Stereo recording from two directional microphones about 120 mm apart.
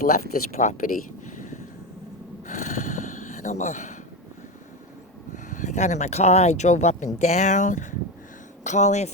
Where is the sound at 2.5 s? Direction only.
75° left (ahead or behind).